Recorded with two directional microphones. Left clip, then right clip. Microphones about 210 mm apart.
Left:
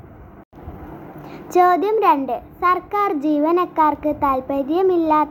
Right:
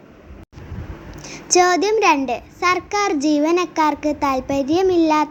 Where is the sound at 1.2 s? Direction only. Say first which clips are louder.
Even; 25° right (ahead or behind).